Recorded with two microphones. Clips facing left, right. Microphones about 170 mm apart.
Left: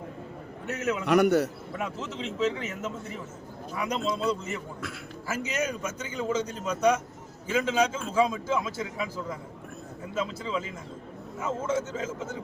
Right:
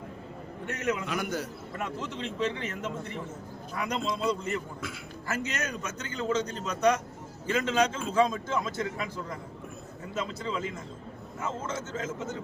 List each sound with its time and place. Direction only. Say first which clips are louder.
0.7 s a man's voice: left 1 dB; 5° left (ahead or behind)
1.0 s a man's voice: left 11 dB; 65° left (ahead or behind)
1.8 s a man's voice: left 1 dB; 5° left (ahead or behind)